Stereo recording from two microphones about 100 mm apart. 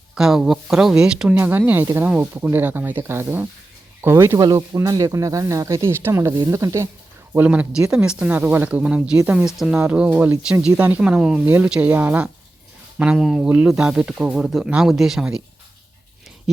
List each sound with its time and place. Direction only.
0.1 s speech: 5° right (ahead or behind)
1.4 s speech: 20° right (ahead or behind)
4.4 s speech: 45° right (ahead or behind)
4.7 s speech: 35° right (ahead or behind)
7.3 s speech: 15° right (ahead or behind)
11.4 s speech: 20° right (ahead or behind)
13.1 s speech: 5° right (ahead or behind)